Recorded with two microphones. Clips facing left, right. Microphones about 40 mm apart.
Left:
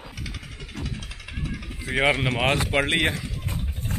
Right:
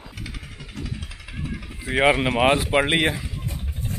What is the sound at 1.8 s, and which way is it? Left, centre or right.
Speech, centre.